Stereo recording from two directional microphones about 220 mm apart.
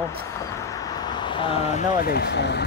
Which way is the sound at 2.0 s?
45° left (ahead or behind).